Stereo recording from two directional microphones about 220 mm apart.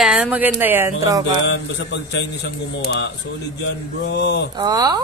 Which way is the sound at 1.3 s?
55° left (ahead or behind).